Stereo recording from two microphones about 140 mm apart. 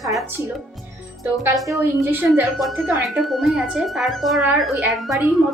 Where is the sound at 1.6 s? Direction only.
20° right (ahead or behind).